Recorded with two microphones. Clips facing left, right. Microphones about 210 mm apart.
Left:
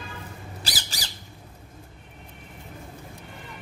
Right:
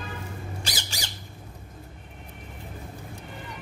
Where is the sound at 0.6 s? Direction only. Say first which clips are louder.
Right 1 dB; 35° left (ahead or behind).